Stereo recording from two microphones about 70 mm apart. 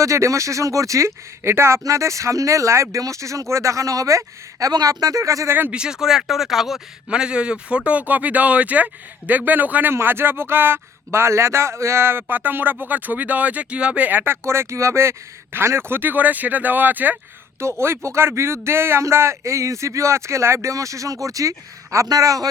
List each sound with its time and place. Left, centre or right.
0.0 s speech: right
4.7 s speech: right
5.7 s speech: centre
7.1 s speech: centre
17.6 s speech: right